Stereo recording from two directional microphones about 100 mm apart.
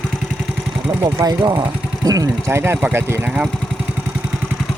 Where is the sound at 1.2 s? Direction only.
40° right (ahead or behind).